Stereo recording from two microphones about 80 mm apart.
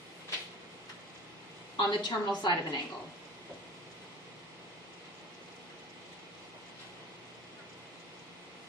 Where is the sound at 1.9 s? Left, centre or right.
Left.